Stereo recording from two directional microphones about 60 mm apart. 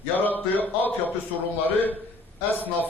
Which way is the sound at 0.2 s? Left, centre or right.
Left.